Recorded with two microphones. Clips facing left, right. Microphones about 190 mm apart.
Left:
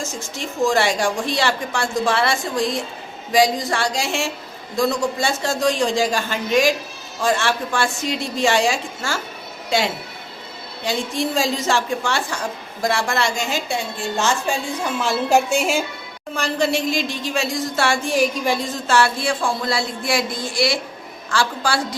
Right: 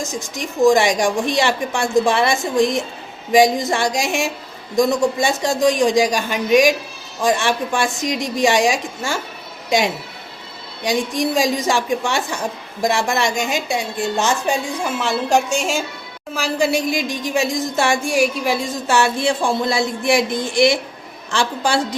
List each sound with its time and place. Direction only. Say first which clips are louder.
0.0 s a woman's voice: right 3 dB; 15° right (ahead or behind)
14.9 s a woman's voice: even; centre (ahead or behind)
16.3 s a woman's voice: right 2 dB; 5° right (ahead or behind)